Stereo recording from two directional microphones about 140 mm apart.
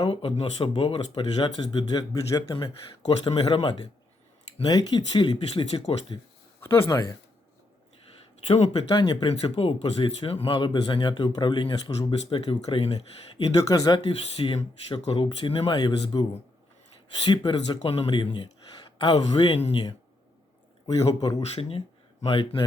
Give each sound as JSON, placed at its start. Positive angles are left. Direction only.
{"t": 0.0, "sound": "speech", "side_deg": 45}
{"t": 2.6, "sound": "speech", "side_deg": 45}
{"t": 4.6, "sound": "speech", "side_deg": 25}
{"t": 6.6, "sound": "speech", "side_deg": 20}
{"t": 8.4, "sound": "speech", "side_deg": 50}
{"t": 9.4, "sound": "speech", "side_deg": 45}
{"t": 13.3, "sound": "speech", "side_deg": 25}
{"t": 17.2, "sound": "speech", "side_deg": 35}
{"t": 20.8, "sound": "speech", "side_deg": 25}
{"t": 21.5, "sound": "speech", "side_deg": 45}